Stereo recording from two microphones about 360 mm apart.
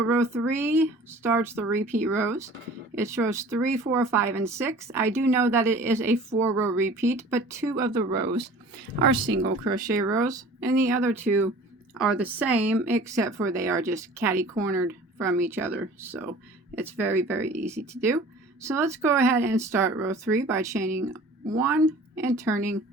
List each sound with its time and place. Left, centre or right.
0.1 s speech: centre
8.3 s speech: right
10.2 s speech: centre